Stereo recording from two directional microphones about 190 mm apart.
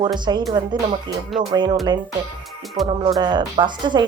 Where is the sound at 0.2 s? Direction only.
25° right (ahead or behind).